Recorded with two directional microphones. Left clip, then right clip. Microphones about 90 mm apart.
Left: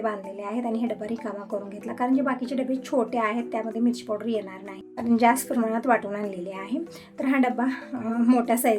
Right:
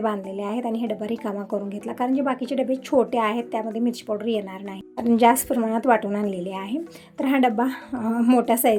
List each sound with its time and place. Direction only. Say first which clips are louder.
0.0 s a woman's voice: right 3 dB; 45° right (ahead or behind)
7.2 s a woman's voice: right 4 dB; 40° right (ahead or behind)